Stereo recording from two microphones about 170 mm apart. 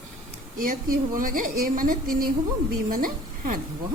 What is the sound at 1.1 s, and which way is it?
A woman's voice, 55° right (ahead or behind).